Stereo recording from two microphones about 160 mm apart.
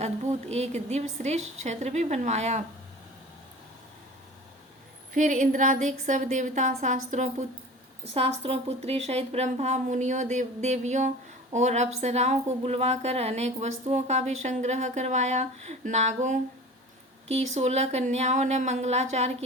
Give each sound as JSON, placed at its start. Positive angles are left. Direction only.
{"t": 0.0, "sound": "a woman's voice", "side_deg": -45}
{"t": 5.1, "sound": "a woman's voice", "side_deg": -50}